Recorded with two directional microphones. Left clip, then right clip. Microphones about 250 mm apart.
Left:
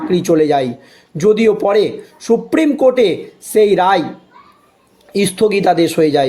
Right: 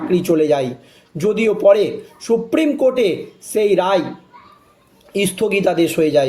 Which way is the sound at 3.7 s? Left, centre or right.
Left.